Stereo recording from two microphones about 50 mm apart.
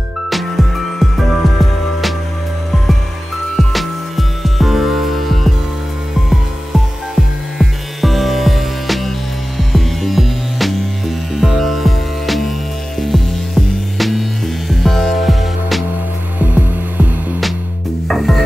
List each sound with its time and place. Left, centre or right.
0.3 s music: centre
3.5 s music: centre
16.3 s music: right
18.0 s music: centre